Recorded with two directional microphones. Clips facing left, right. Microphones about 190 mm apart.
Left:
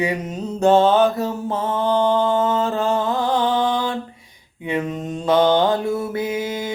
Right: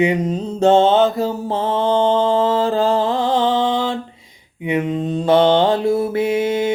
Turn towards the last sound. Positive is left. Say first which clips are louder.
# right 6 dB
turn(degrees=-25)  # may be behind; listen again after turning